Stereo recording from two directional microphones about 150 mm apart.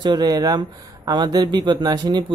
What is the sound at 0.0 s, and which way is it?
Speech, 30° right (ahead or behind).